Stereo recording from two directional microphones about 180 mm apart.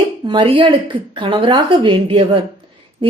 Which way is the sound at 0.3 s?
25° right (ahead or behind).